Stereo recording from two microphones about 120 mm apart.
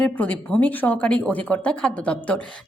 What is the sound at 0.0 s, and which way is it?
Speech, 10° left (ahead or behind).